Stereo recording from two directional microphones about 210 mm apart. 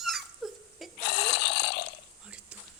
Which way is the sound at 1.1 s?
55° left (ahead or behind).